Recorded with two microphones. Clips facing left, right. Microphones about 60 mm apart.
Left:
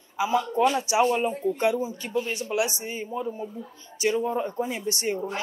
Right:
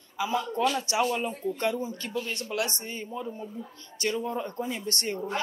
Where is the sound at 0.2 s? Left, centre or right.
Centre.